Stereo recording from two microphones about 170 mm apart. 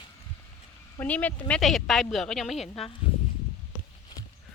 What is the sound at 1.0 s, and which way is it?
A woman's voice, 10° left (ahead or behind).